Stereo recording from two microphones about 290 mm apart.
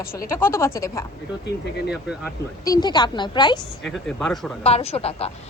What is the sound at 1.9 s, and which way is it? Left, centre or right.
Speech, centre.